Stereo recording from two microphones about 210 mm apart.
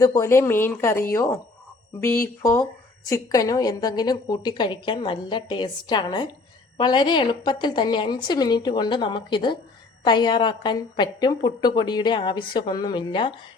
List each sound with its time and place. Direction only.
0.0 s speech: 15° left (ahead or behind)
2.4 s a woman's voice: 10° left (ahead or behind)